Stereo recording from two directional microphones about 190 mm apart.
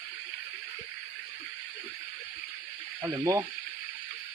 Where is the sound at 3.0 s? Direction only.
20° right (ahead or behind).